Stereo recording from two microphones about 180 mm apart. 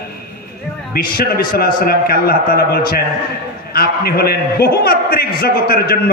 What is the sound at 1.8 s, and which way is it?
A man's voice, 55° left (ahead or behind).